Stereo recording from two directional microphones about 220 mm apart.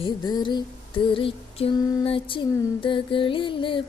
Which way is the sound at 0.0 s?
20° left (ahead or behind).